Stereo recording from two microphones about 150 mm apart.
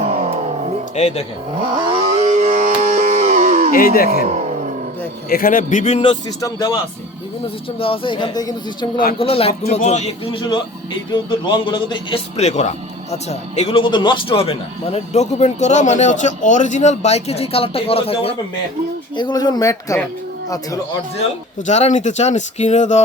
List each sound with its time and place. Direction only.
0.1 s music: 45° right (ahead or behind)
0.9 s speech: 45° left (ahead or behind)
1.7 s music: 35° right (ahead or behind); by 3.7 s 55° right (ahead or behind)
3.7 s speech: 75° left (ahead or behind)
4.3 s a sound: 50° right (ahead or behind)
5.3 s a man's voice: 70° left (ahead or behind); by 6.1 s 40° left (ahead or behind)
6.4 s speech: 25° left (ahead or behind)
7.4 s speech: 40° left (ahead or behind)
9.1 s speech: 40° left (ahead or behind)
11.1 s speech: 30° left (ahead or behind)
12.4 s speech: 50° left (ahead or behind)
19.1 s speech: 30° left (ahead or behind)
21.7 s speech: 50° left (ahead or behind)